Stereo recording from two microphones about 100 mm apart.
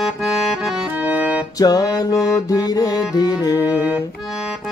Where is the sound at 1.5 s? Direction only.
40° left (ahead or behind).